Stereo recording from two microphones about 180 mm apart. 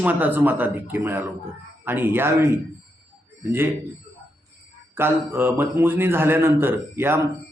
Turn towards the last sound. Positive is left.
turn(degrees=-10)  # may be behind; listen again after turning